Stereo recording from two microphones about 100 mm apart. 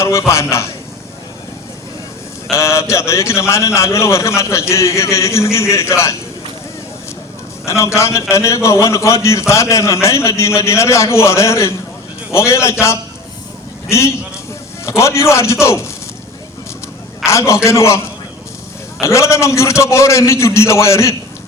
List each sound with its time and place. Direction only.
0.0 s a man's voice: 30° left (ahead or behind)
2.5 s a man's voice: 30° left (ahead or behind)
7.6 s a man's voice: 30° left (ahead or behind)
17.2 s a man's voice: 30° left (ahead or behind)